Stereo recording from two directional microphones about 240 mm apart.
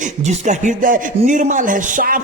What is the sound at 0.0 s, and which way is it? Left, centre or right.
A man's voice, right.